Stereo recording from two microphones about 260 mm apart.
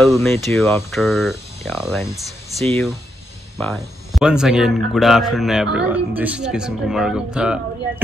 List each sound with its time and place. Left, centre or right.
0.0 s speech: centre
3.5 s speech: centre